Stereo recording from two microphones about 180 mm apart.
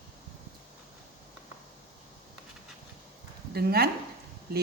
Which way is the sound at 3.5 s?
60° right (ahead or behind).